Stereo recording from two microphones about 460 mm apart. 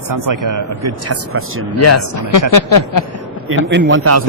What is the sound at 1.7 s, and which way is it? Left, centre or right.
A man's voice, left.